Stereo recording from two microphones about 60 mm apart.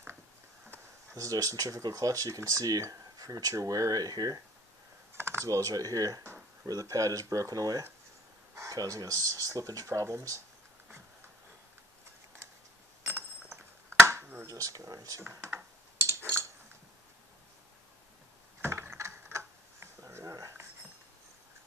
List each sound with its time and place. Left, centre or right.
1.1 s speech: right
5.1 s typing: right
5.4 s speech: right
8.5 s speech: right
13.9 s finger snapping: right
14.4 s speech: right
16.0 s a sound: right
18.6 s typing: right
19.3 s a sound: right